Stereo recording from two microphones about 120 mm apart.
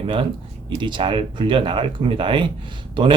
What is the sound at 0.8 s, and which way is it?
A man's voice, 40° right (ahead or behind).